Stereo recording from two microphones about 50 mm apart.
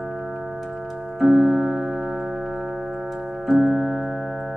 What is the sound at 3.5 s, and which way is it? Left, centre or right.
Music, centre.